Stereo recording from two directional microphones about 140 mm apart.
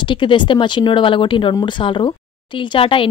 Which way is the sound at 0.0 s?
35° left (ahead or behind).